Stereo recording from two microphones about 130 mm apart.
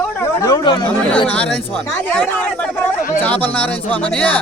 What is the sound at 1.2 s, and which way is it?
Speech, 10° left (ahead or behind).